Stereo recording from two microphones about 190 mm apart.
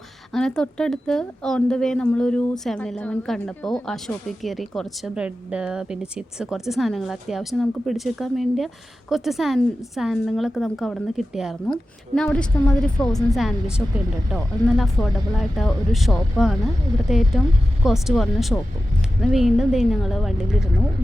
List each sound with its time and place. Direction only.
0.3 s a woman's voice: 5° left (ahead or behind)